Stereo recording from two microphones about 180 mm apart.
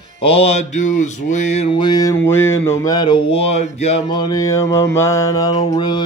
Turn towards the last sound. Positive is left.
turn(degrees=25)  # may be behind; listen again after turning